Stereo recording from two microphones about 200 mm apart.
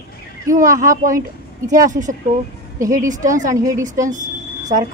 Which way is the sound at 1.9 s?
40° right (ahead or behind).